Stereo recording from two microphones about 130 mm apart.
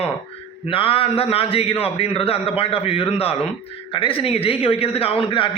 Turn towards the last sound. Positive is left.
turn(degrees=40)  # may be behind; listen again after turning